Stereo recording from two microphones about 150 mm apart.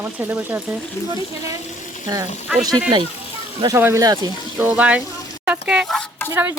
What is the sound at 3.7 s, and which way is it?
Speech, 15° right (ahead or behind).